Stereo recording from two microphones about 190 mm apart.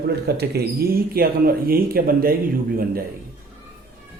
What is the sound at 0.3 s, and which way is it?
Speech, 60° right (ahead or behind).